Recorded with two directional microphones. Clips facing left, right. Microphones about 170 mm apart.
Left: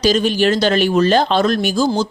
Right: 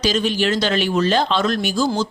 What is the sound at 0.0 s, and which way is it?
Speech, 40° left (ahead or behind).